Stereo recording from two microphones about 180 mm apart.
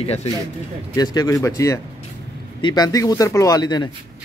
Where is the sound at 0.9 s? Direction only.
20° left (ahead or behind).